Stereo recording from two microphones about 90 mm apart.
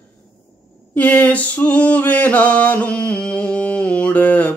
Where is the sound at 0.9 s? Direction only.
15° left (ahead or behind).